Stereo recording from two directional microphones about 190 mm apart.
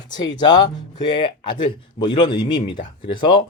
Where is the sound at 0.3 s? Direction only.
20° left (ahead or behind).